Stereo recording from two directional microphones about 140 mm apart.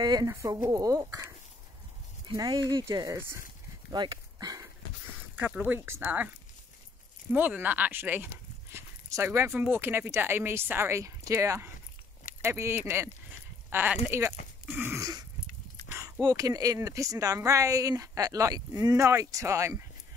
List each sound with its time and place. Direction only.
0.0 s speech: 25° right (ahead or behind)
3.2 s speech: 15° right (ahead or behind)
3.9 s dog: 30° right (ahead or behind)
5.3 s speech: 10° right (ahead or behind)
7.3 s speech: 10° right (ahead or behind)
14.7 s a sound: 15° right (ahead or behind)
16.2 s speech: 25° right (ahead or behind)